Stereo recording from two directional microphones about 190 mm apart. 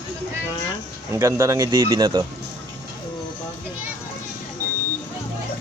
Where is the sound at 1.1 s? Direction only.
15° right (ahead or behind).